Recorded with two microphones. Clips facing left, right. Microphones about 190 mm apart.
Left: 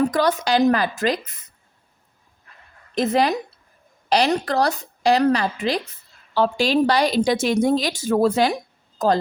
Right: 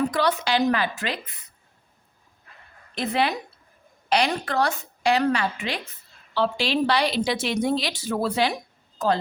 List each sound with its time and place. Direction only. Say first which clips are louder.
0.1 s a woman's voice: left 4 dB; 45° left (ahead or behind)
2.9 s a woman's voice: left 5 dB; 40° left (ahead or behind)